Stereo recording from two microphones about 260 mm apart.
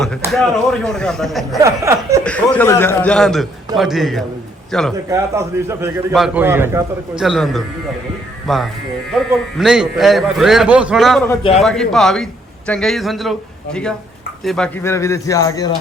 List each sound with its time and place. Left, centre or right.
0.2 s a man's voice: centre
1.5 s a man's voice: centre
2.2 s a man's voice: centre
5.0 s a man's voice: centre
11.3 s a man's voice: centre
11.6 s a man's voice: centre
14.4 s speech: centre